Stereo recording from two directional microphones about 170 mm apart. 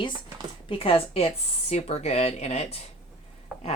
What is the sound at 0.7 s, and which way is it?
Speech, 35° left (ahead or behind).